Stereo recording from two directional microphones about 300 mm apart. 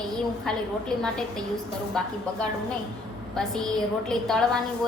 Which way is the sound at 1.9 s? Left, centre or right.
Centre.